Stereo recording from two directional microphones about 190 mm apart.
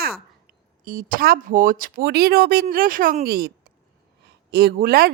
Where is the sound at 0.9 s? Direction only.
45° right (ahead or behind).